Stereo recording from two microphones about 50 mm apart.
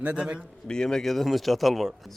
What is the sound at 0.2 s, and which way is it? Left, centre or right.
Speech, centre.